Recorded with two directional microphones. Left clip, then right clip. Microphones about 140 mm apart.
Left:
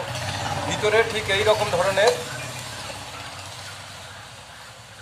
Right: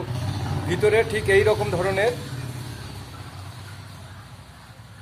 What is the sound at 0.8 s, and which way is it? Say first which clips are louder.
Speech: right 1 dB; 30° right (ahead or behind).